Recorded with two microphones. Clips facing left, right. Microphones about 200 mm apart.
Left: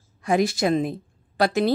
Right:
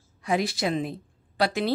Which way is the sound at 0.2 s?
45° left (ahead or behind).